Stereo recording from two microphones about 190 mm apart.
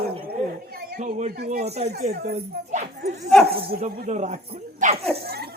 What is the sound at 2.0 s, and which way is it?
Speech, 55° right (ahead or behind).